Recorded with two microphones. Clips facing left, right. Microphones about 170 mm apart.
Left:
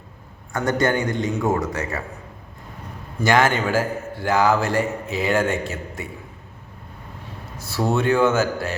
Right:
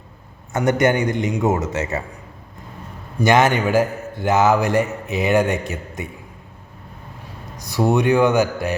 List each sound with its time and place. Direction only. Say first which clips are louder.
0.5 s a man's voice: right 3 dB; 20° right (ahead or behind)
3.2 s a man's voice: right 3 dB; 20° right (ahead or behind)
7.5 s speech: right 4 dB; 15° right (ahead or behind)